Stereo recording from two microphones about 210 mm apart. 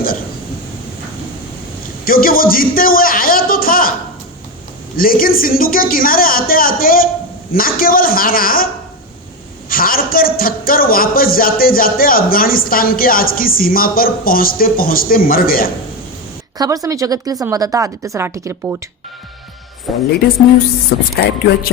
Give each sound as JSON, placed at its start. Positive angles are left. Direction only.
{"t": 2.0, "sound": "a man's voice", "side_deg": 45}
{"t": 4.9, "sound": "a man's voice", "side_deg": 45}
{"t": 9.6, "sound": "a man's voice", "side_deg": 45}
{"t": 16.6, "sound": "speech", "side_deg": -15}
{"t": 19.9, "sound": "speech", "side_deg": 0}
{"t": 20.9, "sound": "a man's voice", "side_deg": 55}